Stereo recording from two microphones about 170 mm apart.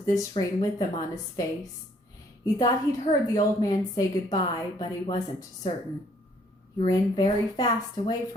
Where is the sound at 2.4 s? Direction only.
20° left (ahead or behind).